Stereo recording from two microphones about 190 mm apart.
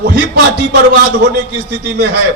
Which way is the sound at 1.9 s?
65° right (ahead or behind).